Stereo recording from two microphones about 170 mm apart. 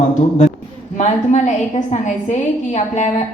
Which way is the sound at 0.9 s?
45° left (ahead or behind).